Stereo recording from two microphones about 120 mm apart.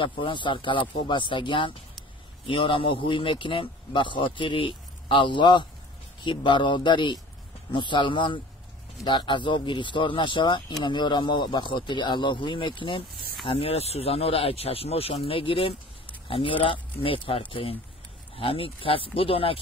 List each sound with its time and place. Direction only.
0.0 s speech: 45° left (ahead or behind)
13.5 s speech: 55° left (ahead or behind)